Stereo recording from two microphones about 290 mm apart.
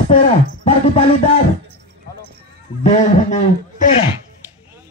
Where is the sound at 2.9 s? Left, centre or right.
Left.